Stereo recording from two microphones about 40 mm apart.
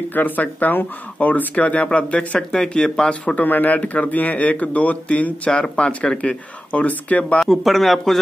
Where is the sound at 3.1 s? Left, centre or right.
Left.